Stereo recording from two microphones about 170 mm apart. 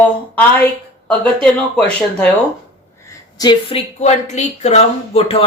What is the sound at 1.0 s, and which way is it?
Speech, 5° left (ahead or behind).